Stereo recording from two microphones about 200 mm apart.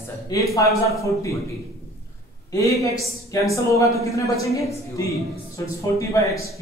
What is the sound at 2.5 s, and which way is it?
A woman's voice, 15° left (ahead or behind).